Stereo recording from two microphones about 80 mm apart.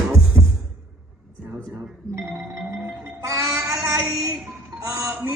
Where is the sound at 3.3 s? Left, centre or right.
Right.